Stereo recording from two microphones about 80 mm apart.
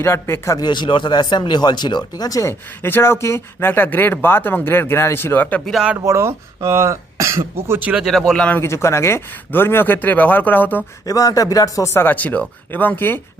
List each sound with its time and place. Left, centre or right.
0.0 s speech: left
0.6 s speech: left
2.4 s speech: left
5.7 s speech: centre
6.1 s speech: right
7.9 s speech: centre
8.6 s speech: left
11.0 s speech: left
11.9 s speech: left